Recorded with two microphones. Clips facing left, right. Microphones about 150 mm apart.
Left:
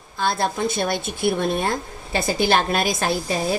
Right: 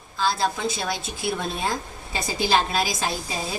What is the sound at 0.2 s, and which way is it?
A woman's voice, 55° left (ahead or behind).